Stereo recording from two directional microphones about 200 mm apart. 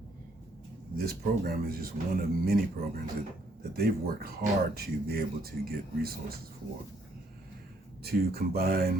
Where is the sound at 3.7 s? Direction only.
50° right (ahead or behind).